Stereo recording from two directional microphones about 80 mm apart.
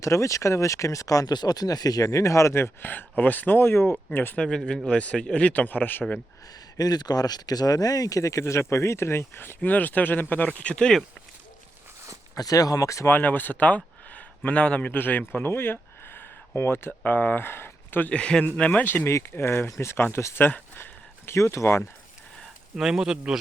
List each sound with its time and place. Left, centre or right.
0.0 s speech: left
4.4 s speech: centre
6.7 s speech: left; by 11.0 s centre
12.3 s speech: left
13.1 s speech: left
18.1 s speech: centre
19.0 s speech: left
22.7 s speech: centre